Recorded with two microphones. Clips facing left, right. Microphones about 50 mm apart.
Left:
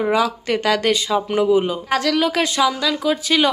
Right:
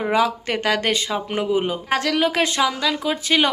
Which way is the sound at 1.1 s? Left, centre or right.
Right.